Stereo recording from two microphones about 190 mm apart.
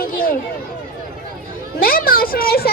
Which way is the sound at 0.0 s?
50° left (ahead or behind).